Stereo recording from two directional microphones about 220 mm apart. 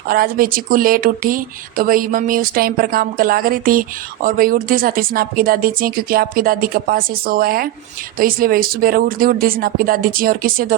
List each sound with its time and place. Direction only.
0.1 s speech: 40° right (ahead or behind)